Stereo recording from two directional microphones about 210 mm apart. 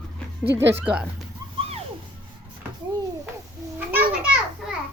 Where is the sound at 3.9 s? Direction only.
5° right (ahead or behind).